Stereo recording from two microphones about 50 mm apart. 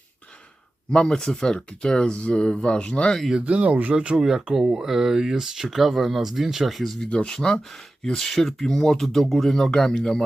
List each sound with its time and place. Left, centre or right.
0.9 s speech: centre
3.3 s speech: right
4.2 s speech: centre
7.1 s speech: left